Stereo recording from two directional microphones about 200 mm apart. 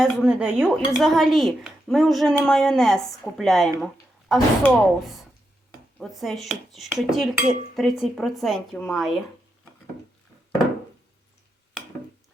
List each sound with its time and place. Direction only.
0.0 s speech: 5° right (ahead or behind)